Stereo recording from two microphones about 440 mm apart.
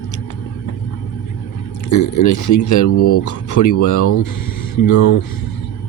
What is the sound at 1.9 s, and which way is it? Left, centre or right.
Speech, left.